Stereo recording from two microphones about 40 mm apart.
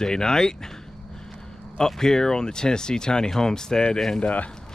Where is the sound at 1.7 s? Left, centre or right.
Centre.